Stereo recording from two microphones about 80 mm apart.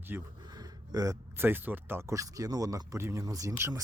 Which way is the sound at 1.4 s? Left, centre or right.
Right.